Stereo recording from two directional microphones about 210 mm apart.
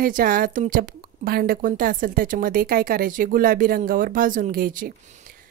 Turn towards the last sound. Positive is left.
turn(degrees=-40)  # may be behind; listen again after turning